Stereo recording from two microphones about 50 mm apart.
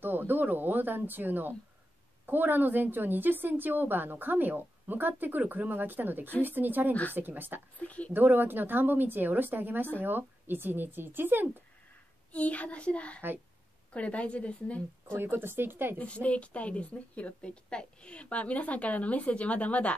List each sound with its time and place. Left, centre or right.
0.0 s a woman's voice: right
6.9 s speech: left
7.2 s a woman's voice: right
7.8 s a woman's voice: left
8.1 s a woman's voice: right
12.3 s a woman's voice: left
15.2 s a woman's voice: right
16.0 s a woman's voice: left